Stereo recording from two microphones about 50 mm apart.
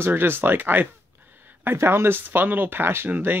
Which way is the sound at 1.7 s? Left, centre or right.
Right.